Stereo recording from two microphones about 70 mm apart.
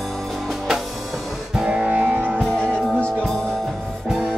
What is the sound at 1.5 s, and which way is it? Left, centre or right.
Music, centre.